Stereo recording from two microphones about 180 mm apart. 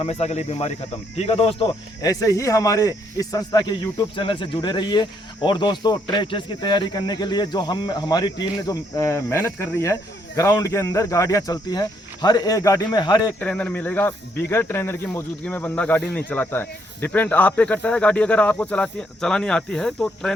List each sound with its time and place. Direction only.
0.0 s speech: 35° left (ahead or behind)
13.4 s speech: 5° left (ahead or behind)